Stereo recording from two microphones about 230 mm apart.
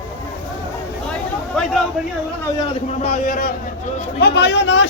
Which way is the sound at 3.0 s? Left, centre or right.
Left.